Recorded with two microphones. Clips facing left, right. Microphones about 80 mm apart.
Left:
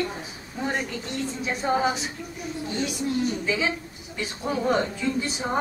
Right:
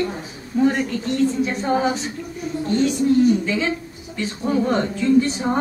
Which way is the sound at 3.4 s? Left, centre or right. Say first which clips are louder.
Right 4 dB; centre.